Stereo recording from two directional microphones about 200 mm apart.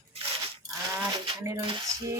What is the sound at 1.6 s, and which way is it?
Cutlery, 25° right (ahead or behind).